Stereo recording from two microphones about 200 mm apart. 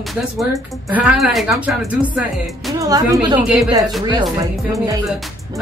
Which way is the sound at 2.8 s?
15° right (ahead or behind).